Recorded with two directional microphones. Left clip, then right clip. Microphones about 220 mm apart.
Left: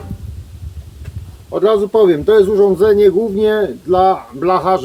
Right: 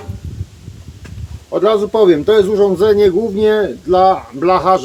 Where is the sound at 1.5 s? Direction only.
15° right (ahead or behind).